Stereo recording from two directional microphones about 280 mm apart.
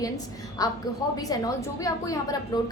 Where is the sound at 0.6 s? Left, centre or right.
Centre.